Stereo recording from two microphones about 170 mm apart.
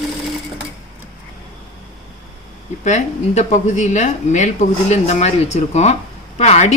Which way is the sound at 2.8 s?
45° left (ahead or behind).